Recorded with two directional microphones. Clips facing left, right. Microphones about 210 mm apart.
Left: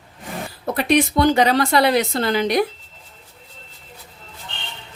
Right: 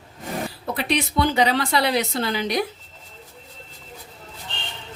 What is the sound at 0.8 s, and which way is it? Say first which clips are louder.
Speech: left 6 dB; 45° left (ahead or behind).